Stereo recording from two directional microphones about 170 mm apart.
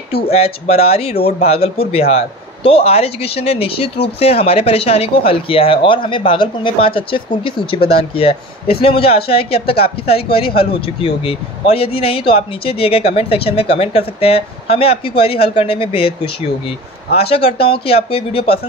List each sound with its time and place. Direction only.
0.1 s a man's voice: 35° left (ahead or behind)